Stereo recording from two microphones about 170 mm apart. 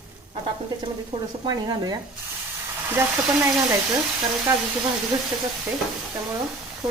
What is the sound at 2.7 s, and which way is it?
Frying, 10° right (ahead or behind).